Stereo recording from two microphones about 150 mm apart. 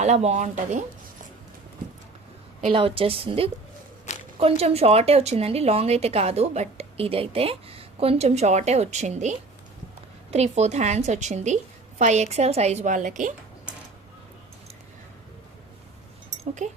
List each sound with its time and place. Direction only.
0.0 s a woman's voice: 50° right (ahead or behind)
2.7 s a woman's voice: 35° right (ahead or behind); by 13.3 s 55° right (ahead or behind)
16.6 s a woman's voice: 50° right (ahead or behind)